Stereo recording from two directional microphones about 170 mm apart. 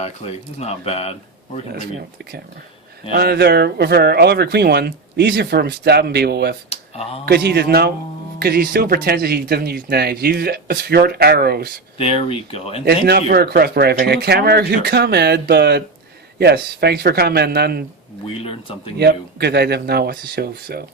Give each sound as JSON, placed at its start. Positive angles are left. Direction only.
{"t": 0.0, "sound": "speech", "side_deg": 40}
{"t": 3.1, "sound": "speech", "side_deg": -70}
{"t": 6.7, "sound": "a sound", "side_deg": 35}
{"t": 7.3, "sound": "speech", "side_deg": -70}
{"t": 11.9, "sound": "speech", "side_deg": 35}
{"t": 12.8, "sound": "speech", "side_deg": -70}
{"t": 18.9, "sound": "speech", "side_deg": -75}